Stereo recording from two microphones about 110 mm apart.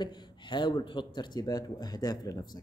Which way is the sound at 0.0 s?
45° left (ahead or behind).